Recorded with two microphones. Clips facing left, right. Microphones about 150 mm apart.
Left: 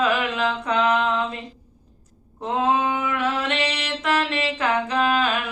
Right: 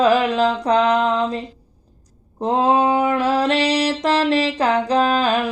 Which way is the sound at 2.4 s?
35° right (ahead or behind).